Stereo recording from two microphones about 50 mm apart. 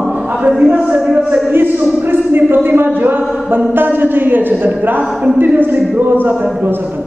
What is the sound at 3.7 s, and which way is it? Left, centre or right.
A woman's voice, right.